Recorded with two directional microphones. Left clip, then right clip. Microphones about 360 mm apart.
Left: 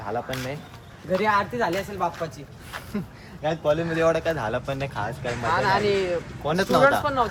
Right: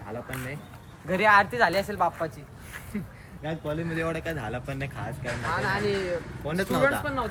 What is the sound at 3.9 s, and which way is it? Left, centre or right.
Speech, centre.